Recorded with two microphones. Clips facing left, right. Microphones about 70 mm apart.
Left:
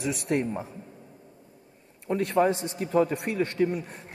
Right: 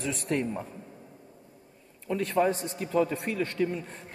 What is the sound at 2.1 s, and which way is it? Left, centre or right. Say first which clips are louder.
Speech: left 2 dB; left.